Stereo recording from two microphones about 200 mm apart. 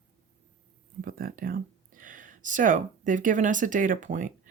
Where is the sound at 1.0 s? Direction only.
45° right (ahead or behind).